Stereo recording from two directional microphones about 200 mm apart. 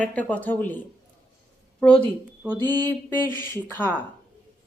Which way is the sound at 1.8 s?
5° left (ahead or behind).